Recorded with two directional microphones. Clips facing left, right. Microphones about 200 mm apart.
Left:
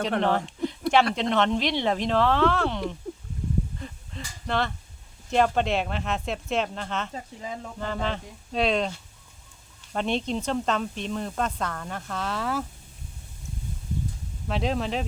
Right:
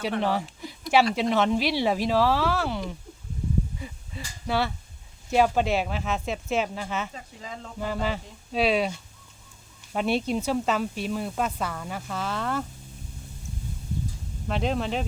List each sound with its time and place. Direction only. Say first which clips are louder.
0.2 s a sound: left 2 dB; 5° right (ahead or behind)
1.1 s speech: right 1 dB; 5° right (ahead or behind)
3.8 s a sound: even; 5° right (ahead or behind)
5.3 s speech: right 1 dB; 5° right (ahead or behind)
7.1 s speech: left 4 dB; 20° left (ahead or behind)
7.8 s speech: right 2 dB; 5° right (ahead or behind)
14.4 s speech: even; centre (ahead or behind)